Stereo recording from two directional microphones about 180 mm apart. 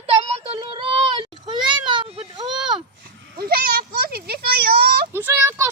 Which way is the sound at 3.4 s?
60° right (ahead or behind).